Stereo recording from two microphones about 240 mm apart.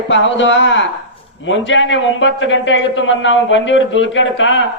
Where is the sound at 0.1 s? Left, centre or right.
Left.